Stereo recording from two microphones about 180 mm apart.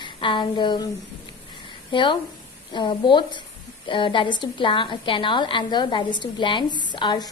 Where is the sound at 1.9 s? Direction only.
25° left (ahead or behind).